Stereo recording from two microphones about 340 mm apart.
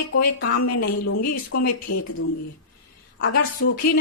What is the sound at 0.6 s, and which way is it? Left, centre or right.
Speech, left.